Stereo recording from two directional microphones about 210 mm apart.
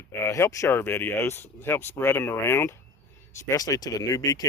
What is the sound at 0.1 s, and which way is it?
Speech, 10° left (ahead or behind).